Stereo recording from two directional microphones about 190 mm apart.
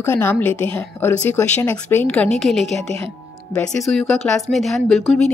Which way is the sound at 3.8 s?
Centre (ahead or behind).